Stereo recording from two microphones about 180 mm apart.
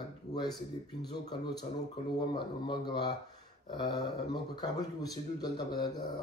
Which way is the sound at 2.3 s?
25° left (ahead or behind).